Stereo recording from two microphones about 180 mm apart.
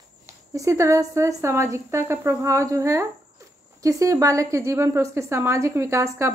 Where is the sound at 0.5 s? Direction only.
15° right (ahead or behind).